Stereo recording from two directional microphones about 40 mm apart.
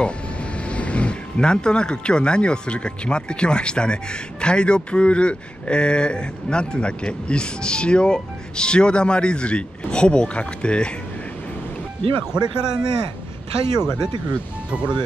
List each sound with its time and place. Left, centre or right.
0.6 s speech: left
12.3 s speech: centre
14.3 s speech: right